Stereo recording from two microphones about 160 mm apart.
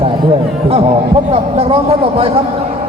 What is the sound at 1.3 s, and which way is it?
Speech, 35° right (ahead or behind).